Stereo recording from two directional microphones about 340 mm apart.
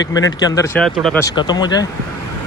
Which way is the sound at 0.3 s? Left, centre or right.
Centre.